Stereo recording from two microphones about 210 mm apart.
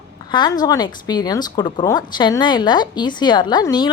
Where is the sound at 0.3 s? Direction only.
20° left (ahead or behind).